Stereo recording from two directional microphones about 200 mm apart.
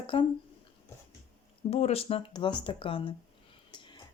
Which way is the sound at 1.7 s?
30° left (ahead or behind).